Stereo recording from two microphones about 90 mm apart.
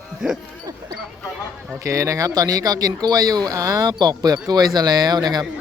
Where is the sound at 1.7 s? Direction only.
35° right (ahead or behind).